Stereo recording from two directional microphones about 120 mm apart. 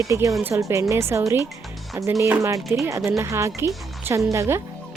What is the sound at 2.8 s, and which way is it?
A woman's voice, 25° right (ahead or behind).